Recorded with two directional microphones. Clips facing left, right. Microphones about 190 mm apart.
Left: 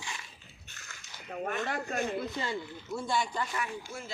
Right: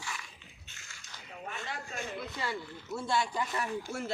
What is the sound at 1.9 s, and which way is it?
Speech, 60° left (ahead or behind).